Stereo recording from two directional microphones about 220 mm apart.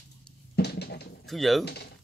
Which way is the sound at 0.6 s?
45° left (ahead or behind).